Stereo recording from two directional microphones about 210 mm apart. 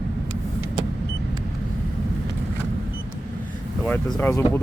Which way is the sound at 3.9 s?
10° left (ahead or behind).